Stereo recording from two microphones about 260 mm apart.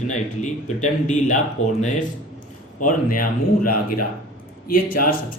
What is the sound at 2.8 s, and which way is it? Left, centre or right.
Speech, left.